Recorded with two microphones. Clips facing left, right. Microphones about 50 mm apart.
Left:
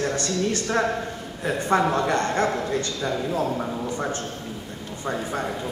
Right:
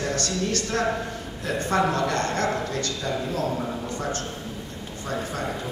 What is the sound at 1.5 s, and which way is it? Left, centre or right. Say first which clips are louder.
A man's voice: left 2 dB; left.